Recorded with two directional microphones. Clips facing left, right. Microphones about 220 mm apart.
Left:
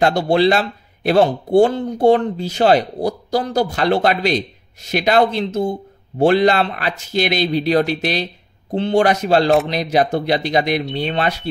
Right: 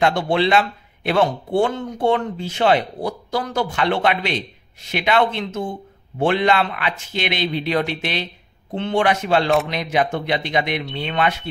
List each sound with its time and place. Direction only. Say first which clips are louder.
0.0 s speech: left 4 dB; 35° left (ahead or behind)